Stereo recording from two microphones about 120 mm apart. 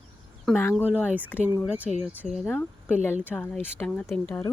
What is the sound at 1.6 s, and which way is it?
Speech, 5° right (ahead or behind).